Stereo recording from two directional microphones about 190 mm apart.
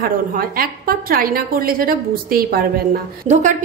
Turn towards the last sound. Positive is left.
turn(degrees=-40)  # may be behind; listen again after turning